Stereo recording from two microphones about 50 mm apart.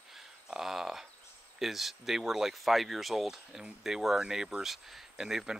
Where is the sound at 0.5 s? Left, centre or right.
Centre.